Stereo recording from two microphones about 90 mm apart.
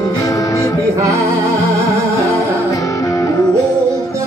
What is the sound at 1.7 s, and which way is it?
Music, 35° right (ahead or behind).